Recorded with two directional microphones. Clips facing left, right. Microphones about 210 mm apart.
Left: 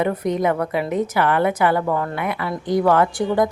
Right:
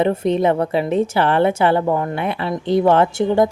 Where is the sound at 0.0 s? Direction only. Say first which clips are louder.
Right 4 dB; 30° right (ahead or behind).